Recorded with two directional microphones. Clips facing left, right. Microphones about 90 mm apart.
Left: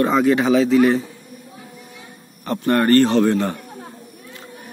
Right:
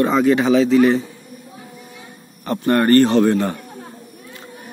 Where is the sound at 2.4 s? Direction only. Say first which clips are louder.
Right 1 dB; 30° right (ahead or behind).